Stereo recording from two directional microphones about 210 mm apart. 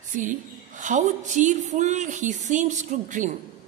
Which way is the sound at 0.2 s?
35° right (ahead or behind).